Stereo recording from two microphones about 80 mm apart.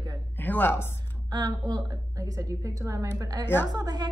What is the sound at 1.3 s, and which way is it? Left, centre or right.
A woman's voice, right.